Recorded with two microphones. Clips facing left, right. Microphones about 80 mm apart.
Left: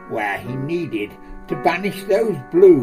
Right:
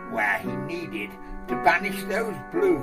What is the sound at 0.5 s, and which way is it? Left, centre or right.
Speech, centre.